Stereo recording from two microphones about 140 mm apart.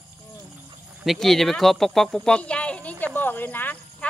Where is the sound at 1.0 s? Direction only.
Centre (ahead or behind).